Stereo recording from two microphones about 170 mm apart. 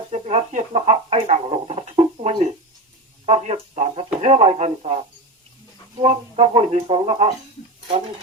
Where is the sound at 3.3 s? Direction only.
35° right (ahead or behind).